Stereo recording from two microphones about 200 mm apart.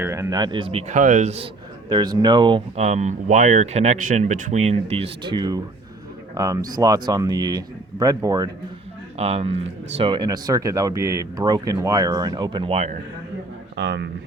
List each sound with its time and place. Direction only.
0.0 s speech: 15° right (ahead or behind); by 1.5 s 35° right (ahead or behind)
1.9 s speech: 20° right (ahead or behind)
9.1 s speech: 30° right (ahead or behind)
13.7 s speech: 60° right (ahead or behind)